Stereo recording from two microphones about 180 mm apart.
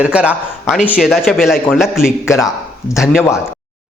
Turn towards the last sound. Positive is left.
turn(degrees=0)  # may be behind; listen again after turning